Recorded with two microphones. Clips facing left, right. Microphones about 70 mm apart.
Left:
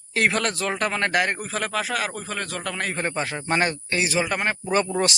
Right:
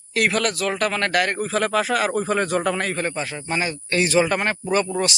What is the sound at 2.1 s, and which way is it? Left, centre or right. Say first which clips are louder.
Speech: right 10 dB; right.